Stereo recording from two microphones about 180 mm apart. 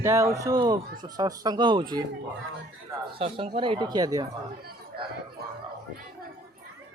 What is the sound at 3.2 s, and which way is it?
Speech, 30° right (ahead or behind).